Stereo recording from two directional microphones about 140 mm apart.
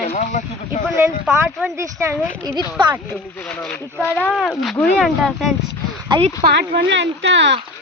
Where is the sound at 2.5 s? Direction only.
30° left (ahead or behind).